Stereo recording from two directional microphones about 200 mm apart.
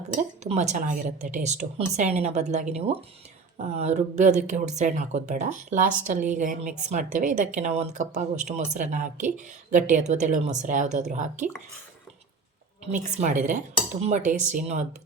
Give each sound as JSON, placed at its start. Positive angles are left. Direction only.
{"t": 0.4, "sound": "speech", "side_deg": -35}
{"t": 12.9, "sound": "speech", "side_deg": -40}